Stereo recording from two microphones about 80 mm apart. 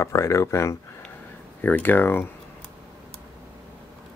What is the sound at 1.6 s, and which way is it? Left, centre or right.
Speech, left.